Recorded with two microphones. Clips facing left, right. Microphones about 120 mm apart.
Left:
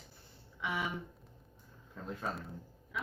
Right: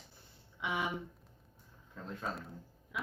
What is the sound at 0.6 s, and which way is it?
Speech, 20° right (ahead or behind).